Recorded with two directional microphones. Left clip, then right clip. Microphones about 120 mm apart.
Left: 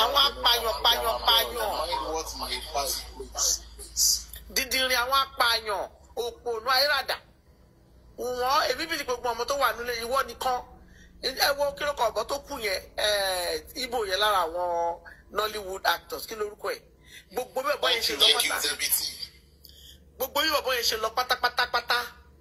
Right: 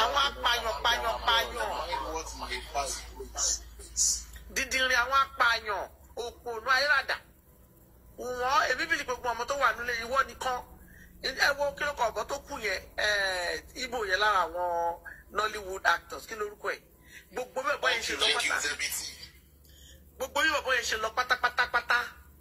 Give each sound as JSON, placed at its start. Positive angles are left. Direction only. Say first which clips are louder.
{"t": 0.0, "sound": "a sound", "louder": "left 4 dB", "side_deg": 25}
{"t": 2.5, "sound": "speech", "louder": "left 3 dB", "side_deg": 25}
{"t": 20.5, "sound": "speech", "louder": "left 2 dB", "side_deg": 25}